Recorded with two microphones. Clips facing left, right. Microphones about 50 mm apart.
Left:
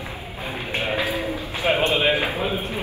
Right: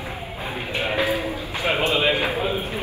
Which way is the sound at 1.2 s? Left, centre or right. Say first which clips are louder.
Left 1 dB; left.